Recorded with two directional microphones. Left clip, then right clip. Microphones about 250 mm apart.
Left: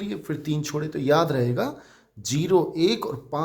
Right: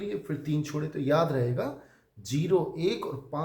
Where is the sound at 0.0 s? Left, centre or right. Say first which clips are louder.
Left 2 dB; left.